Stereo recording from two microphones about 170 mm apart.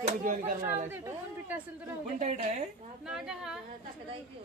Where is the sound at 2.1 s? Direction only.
45° right (ahead or behind).